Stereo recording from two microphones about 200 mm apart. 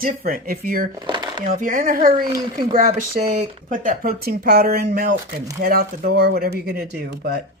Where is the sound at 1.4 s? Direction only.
45° right (ahead or behind).